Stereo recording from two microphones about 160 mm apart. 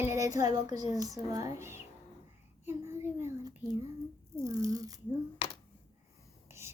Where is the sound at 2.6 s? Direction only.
15° right (ahead or behind).